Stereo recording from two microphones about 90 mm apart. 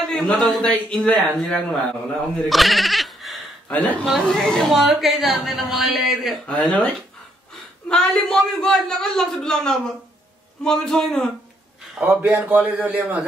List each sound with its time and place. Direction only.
0.1 s a man's voice: 5° left (ahead or behind)
3.6 s a man's voice: 15° left (ahead or behind); by 6.3 s centre (ahead or behind)
6.4 s a man's voice: 10° left (ahead or behind)
7.9 s a man's voice: 5° left (ahead or behind)
12.1 s a man's voice: 20° right (ahead or behind)